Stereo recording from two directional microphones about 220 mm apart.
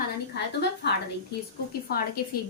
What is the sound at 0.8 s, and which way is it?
Speech, 50° left (ahead or behind).